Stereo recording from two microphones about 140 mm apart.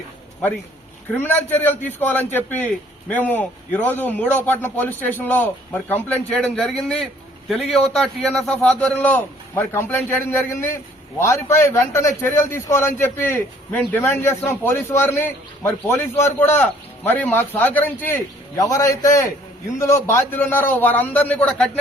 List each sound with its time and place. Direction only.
1.1 s a man's voice: 15° left (ahead or behind)
18.5 s a man's voice: 25° left (ahead or behind)